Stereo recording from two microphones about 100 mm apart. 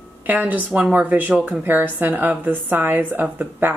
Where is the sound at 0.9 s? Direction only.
15° right (ahead or behind).